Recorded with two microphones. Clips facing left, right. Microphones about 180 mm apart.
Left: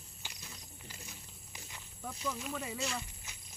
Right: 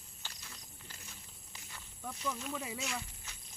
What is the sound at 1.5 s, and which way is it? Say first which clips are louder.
Wild animals: left 1 dB; 15° left (ahead or behind).